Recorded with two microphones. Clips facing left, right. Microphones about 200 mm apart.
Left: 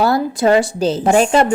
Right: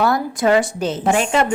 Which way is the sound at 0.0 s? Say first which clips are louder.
Left 3 dB; 30° left (ahead or behind).